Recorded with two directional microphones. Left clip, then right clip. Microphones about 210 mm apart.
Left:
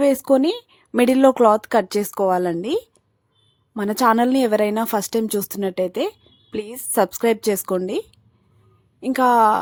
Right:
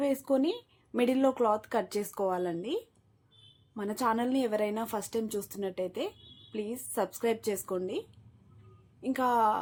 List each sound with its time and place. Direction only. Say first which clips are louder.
0.0 s a woman's voice: left 12 dB; 50° left (ahead or behind)